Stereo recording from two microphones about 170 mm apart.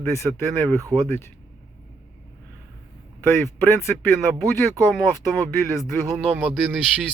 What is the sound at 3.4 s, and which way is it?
Speech, 15° left (ahead or behind).